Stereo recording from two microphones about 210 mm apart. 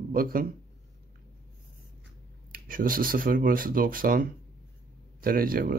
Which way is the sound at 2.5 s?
40° right (ahead or behind).